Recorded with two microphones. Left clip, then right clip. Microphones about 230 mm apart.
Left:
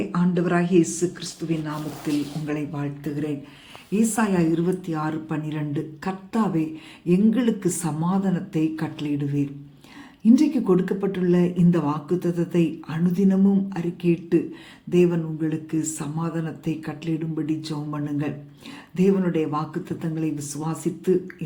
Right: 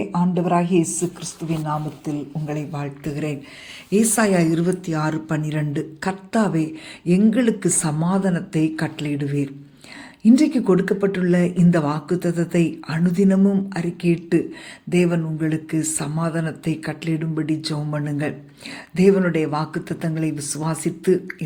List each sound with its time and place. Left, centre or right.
0.2 s speech: centre
2.5 s speech: right
3.9 s speech: centre